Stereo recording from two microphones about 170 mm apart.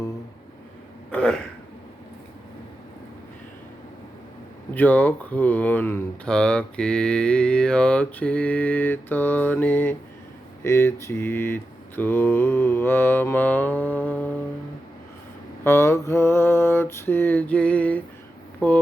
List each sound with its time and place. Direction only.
1.1 s throat clearing: 5° left (ahead or behind)
4.7 s speech: 10° left (ahead or behind)
15.6 s speech: 15° left (ahead or behind)